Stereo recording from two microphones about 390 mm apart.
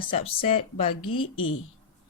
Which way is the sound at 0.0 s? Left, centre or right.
Centre.